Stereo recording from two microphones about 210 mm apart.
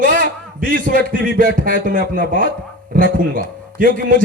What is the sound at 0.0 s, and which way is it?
A man's voice, 40° right (ahead or behind).